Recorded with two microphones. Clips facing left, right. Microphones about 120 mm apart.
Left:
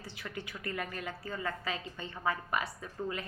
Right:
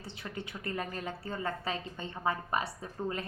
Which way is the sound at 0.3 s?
30° right (ahead or behind).